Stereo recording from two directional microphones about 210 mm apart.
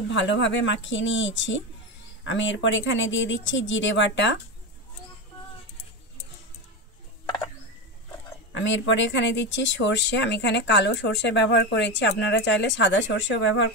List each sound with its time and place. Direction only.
0.1 s speech: 60° left (ahead or behind)
8.5 s speech: 60° left (ahead or behind)